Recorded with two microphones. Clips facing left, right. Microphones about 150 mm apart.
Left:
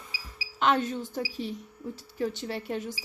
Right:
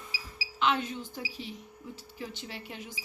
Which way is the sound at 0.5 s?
45° left (ahead or behind).